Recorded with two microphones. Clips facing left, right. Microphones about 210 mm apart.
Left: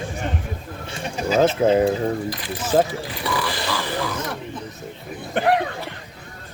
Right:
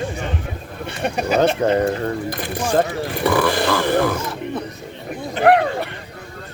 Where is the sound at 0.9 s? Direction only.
65° right (ahead or behind).